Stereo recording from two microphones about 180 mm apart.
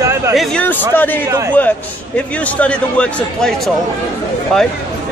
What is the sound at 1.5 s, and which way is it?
Speech, 10° left (ahead or behind).